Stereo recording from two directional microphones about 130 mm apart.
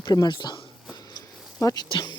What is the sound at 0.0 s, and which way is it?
Speech, 30° left (ahead or behind).